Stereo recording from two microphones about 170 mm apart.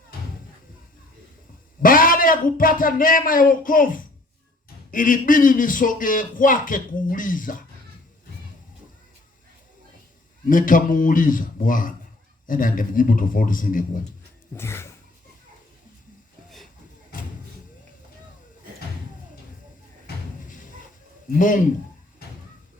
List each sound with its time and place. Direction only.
1.8 s a man's voice: 55° left (ahead or behind)
10.5 s a man's voice: 55° left (ahead or behind)
14.5 s a sound: 15° left (ahead or behind)
20.1 s thump: 65° left (ahead or behind)
21.3 s a man's voice: 50° left (ahead or behind)